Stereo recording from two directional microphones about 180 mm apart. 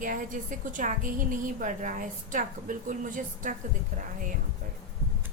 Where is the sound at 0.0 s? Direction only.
45° right (ahead or behind).